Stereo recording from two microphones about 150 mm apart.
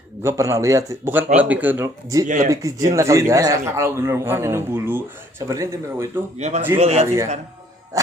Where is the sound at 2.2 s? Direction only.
60° right (ahead or behind).